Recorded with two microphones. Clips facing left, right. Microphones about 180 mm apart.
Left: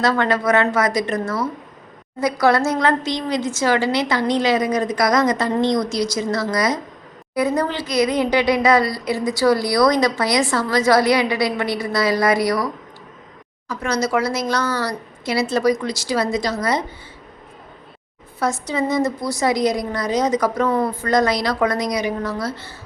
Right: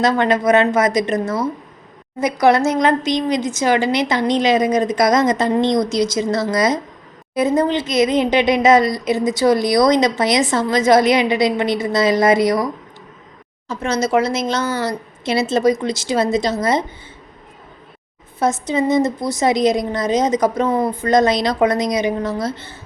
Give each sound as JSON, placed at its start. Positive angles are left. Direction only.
{"t": 0.0, "sound": "speech", "side_deg": -20}
{"t": 18.3, "sound": "speech", "side_deg": -20}